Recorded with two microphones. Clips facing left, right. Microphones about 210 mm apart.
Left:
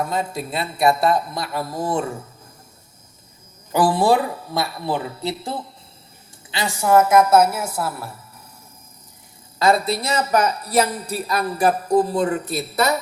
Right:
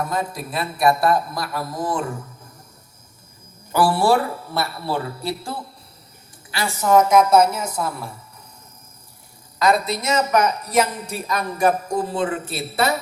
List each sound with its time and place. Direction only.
0.1 s speech: 25° left (ahead or behind)
3.7 s speech: 20° left (ahead or behind)
9.6 s a woman's voice: 30° left (ahead or behind)